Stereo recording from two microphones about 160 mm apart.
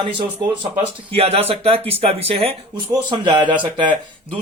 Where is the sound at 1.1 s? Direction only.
40° right (ahead or behind).